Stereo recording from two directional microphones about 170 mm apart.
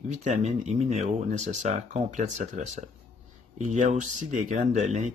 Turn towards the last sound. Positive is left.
turn(degrees=-45)  # may be behind; listen again after turning